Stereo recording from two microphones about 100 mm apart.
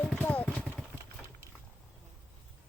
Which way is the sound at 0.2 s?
15° left (ahead or behind).